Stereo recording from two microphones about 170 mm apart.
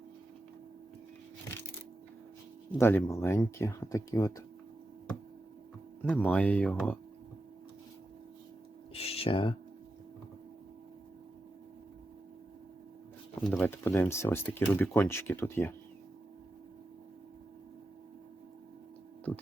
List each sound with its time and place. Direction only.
2.7 s speech: 15° left (ahead or behind)
6.0 s speech: 10° left (ahead or behind)
8.9 s a sound: 35° left (ahead or behind)
13.4 s speech: centre (ahead or behind)
13.7 s speech: 10° left (ahead or behind)